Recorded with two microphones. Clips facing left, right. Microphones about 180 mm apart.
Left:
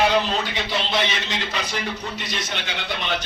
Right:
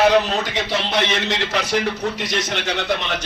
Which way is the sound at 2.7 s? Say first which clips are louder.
Right 8 dB; 45° right (ahead or behind).